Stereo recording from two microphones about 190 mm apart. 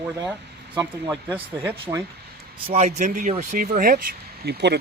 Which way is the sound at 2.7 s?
35° right (ahead or behind).